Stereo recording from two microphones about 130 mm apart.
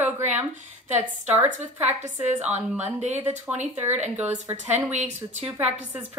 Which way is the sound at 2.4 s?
60° right (ahead or behind).